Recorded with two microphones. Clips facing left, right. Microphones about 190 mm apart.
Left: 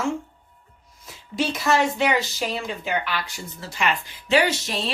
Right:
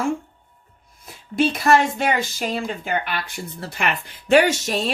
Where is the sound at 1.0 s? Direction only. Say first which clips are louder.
Right 5 dB; 55° right (ahead or behind).